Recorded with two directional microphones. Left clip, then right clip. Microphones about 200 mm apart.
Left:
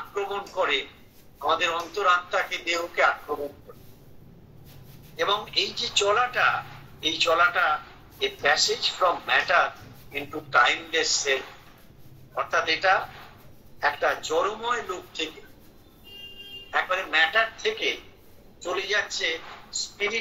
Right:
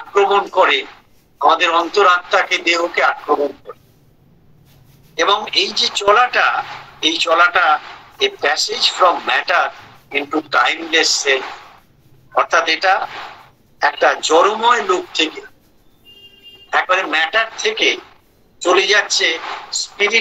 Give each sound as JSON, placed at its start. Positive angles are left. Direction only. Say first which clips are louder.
{"t": 0.1, "sound": "a man's voice", "louder": "right 18 dB", "side_deg": -45}
{"t": 5.1, "sound": "a man's voice", "louder": "right 10 dB", "side_deg": -45}
{"t": 16.7, "sound": "a man's voice", "louder": "right 9 dB", "side_deg": -45}